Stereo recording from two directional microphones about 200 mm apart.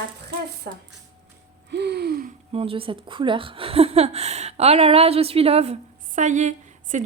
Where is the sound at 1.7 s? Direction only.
55° right (ahead or behind).